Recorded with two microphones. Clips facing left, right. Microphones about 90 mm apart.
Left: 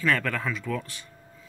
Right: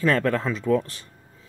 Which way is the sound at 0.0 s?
35° right (ahead or behind).